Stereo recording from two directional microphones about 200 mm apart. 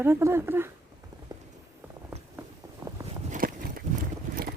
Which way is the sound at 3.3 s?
45° right (ahead or behind).